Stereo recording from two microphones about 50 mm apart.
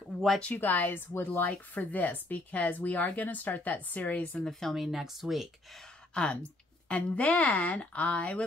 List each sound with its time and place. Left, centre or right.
0.6 s speech: left
1.7 s speech: left
4.5 s speech: centre
4.8 s speech: centre
6.1 s speech: left